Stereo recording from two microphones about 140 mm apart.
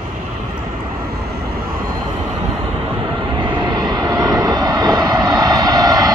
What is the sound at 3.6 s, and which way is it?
Vehicle, 30° right (ahead or behind).